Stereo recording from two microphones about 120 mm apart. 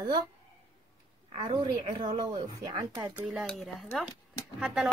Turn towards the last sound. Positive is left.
turn(degrees=-5)  # may be behind; listen again after turning